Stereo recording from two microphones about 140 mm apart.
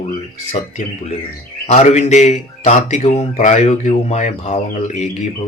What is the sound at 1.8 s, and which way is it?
Speech, 55° left (ahead or behind).